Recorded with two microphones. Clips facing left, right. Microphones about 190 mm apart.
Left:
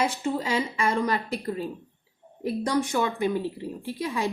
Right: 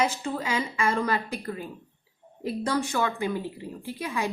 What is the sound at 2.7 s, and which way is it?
Speech, 20° left (ahead or behind).